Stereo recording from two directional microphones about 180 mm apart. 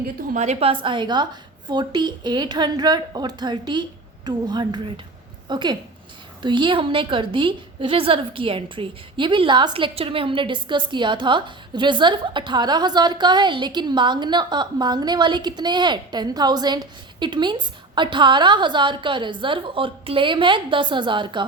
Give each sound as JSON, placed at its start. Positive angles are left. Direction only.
{"t": 0.2, "sound": "a woman's voice", "side_deg": -40}